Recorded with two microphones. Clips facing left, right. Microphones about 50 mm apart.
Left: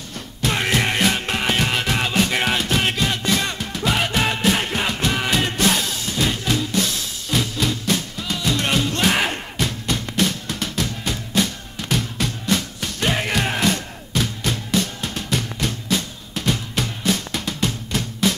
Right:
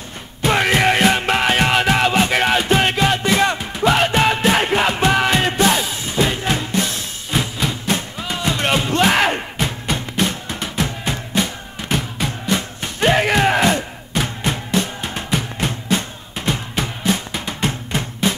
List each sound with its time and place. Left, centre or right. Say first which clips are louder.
0.4 s music: right 5 dB; right